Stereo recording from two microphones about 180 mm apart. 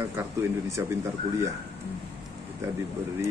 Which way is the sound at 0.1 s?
15° right (ahead or behind).